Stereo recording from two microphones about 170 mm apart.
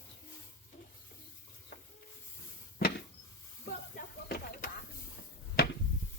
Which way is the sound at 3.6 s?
65° left (ahead or behind).